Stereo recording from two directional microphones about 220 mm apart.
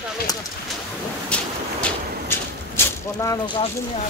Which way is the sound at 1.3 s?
5° left (ahead or behind).